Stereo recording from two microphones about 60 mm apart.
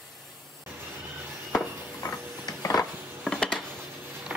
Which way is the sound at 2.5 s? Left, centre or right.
Left.